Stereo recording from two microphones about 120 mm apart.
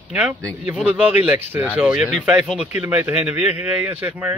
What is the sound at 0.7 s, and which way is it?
Speech, 10° right (ahead or behind).